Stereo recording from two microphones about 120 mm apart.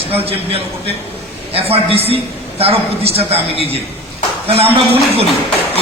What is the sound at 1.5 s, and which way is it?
A man's voice, 55° right (ahead or behind).